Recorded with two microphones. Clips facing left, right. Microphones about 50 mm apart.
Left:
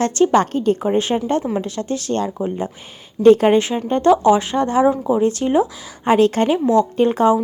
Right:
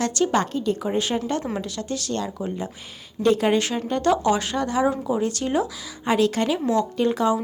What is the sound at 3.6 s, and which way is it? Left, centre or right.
Speech, left.